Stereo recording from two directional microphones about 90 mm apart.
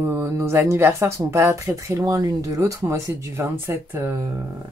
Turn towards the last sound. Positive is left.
turn(degrees=-25)  # may be behind; listen again after turning